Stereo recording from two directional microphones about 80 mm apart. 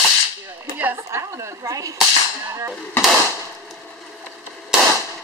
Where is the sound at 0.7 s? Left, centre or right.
Right.